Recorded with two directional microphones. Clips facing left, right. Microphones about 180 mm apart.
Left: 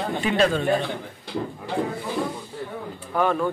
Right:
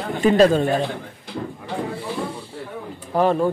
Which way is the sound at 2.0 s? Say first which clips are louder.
Even; 30° right (ahead or behind).